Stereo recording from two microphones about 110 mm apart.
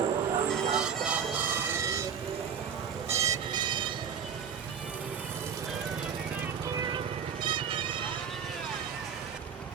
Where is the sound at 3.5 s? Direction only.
45° right (ahead or behind).